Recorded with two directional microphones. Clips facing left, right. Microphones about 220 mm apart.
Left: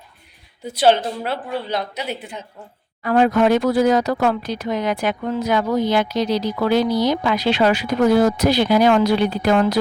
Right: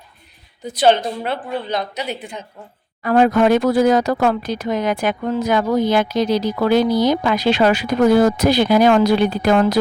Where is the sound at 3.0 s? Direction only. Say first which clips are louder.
Right 2 dB; 50° right (ahead or behind).